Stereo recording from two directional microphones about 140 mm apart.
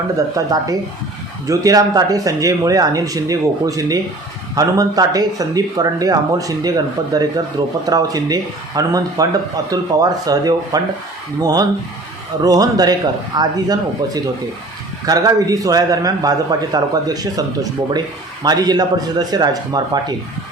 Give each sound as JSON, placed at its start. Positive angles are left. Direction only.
{"t": 0.3, "sound": "a man's voice", "side_deg": -25}